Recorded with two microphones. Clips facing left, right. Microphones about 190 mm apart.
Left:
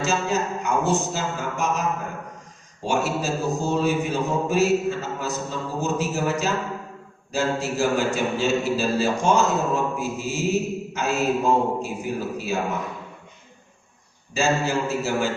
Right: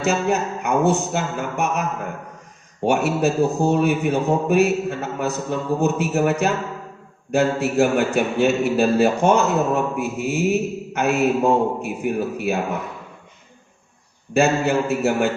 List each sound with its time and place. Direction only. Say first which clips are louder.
0.0 s a man's voice: right 3 dB; 60° right (ahead or behind)
2.8 s a man's voice: right 5 dB; 60° right (ahead or behind)
14.3 s a man's voice: right 5 dB; 60° right (ahead or behind)